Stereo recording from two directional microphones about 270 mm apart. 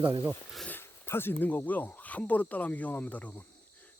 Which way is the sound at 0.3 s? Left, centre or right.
Centre.